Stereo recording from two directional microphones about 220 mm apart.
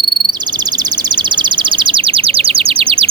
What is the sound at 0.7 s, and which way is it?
Bird, 20° right (ahead or behind).